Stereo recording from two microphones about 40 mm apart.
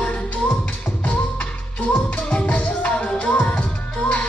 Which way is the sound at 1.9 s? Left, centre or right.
Left.